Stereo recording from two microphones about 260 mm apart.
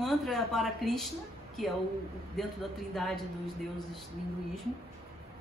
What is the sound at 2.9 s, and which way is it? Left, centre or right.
Speech, centre.